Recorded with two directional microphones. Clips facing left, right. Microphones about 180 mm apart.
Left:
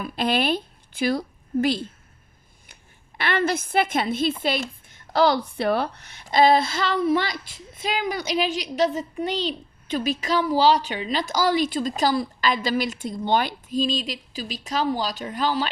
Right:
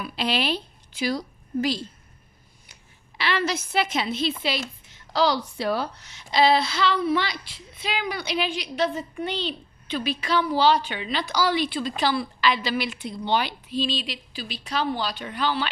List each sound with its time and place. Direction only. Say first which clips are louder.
0.0 s a woman's voice: left 3 dB; 50° left (ahead or behind)
3.2 s a woman's voice: left 2 dB; 55° left (ahead or behind)